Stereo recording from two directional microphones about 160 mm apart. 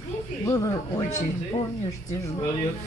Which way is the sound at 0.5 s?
20° left (ahead or behind).